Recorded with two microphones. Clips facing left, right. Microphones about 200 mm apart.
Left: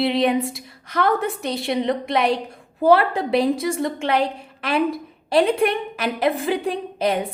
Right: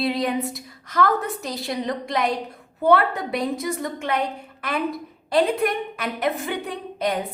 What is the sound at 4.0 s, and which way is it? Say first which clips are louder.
Speech: left 4 dB; 85° left.